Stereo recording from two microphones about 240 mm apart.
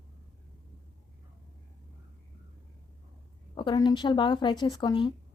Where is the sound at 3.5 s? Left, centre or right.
Centre.